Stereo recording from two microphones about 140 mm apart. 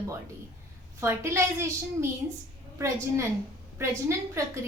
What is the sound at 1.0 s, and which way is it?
A woman's voice, 20° right (ahead or behind).